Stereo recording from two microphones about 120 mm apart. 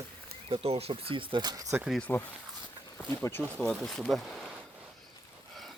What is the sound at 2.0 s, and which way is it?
Speech, 15° left (ahead or behind).